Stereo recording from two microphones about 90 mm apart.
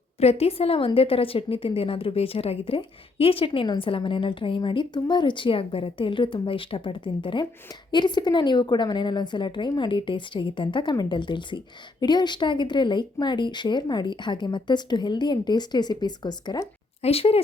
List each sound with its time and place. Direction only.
0.3 s a woman's voice: 90° left; by 7.4 s 65° left (ahead or behind)
7.7 s a woman's voice: 55° left (ahead or behind)
17.1 s a woman's voice: 90° left